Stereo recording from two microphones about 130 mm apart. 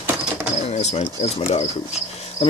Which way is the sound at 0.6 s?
55° left (ahead or behind).